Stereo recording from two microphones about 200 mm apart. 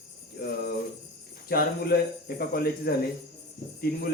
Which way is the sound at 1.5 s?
50° left (ahead or behind).